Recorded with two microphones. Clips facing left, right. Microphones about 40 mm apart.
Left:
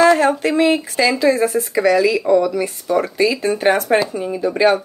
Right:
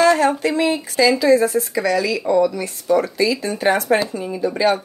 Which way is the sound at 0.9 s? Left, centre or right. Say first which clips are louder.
Right 1 dB; left.